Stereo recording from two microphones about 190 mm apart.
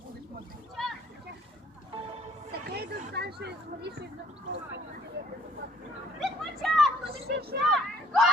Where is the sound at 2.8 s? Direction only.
60° right (ahead or behind).